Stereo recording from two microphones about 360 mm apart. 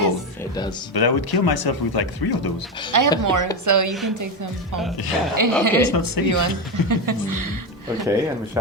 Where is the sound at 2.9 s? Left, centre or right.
Right.